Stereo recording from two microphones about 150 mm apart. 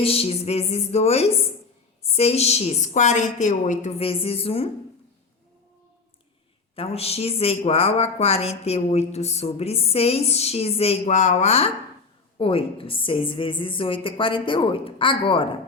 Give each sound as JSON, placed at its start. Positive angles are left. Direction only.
{"t": 0.0, "sound": "speech", "side_deg": 40}
{"t": 6.7, "sound": "a woman's voice", "side_deg": 40}